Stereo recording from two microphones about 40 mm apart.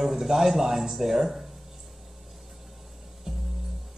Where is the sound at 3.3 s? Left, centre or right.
Centre.